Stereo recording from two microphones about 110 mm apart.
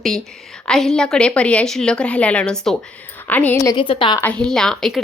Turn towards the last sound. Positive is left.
turn(degrees=5)  # may be behind; listen again after turning